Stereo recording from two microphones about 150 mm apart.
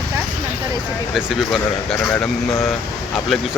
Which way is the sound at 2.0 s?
10° left (ahead or behind).